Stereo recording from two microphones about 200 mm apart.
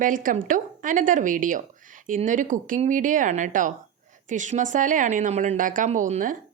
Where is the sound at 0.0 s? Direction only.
45° right (ahead or behind).